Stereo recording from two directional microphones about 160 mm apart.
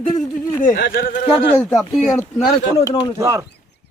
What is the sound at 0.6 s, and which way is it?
Speech, 65° left (ahead or behind).